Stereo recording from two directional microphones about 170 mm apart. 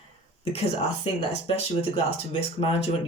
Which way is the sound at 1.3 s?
35° left (ahead or behind).